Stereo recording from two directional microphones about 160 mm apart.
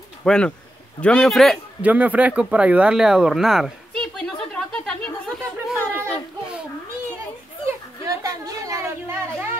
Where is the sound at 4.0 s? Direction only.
5° left (ahead or behind).